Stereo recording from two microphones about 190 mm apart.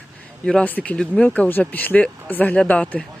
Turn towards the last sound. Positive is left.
turn(degrees=5)  # may be behind; listen again after turning